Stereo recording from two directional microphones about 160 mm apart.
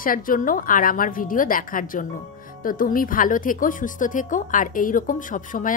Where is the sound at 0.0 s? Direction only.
60° left (ahead or behind).